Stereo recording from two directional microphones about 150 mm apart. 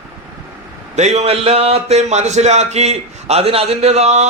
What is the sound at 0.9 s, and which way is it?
A man's voice, 50° right (ahead or behind).